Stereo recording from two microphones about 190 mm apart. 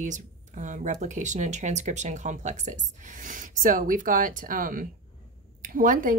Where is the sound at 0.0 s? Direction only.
40° right (ahead or behind).